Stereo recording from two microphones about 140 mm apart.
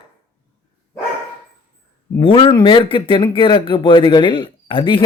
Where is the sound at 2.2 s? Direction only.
40° left (ahead or behind).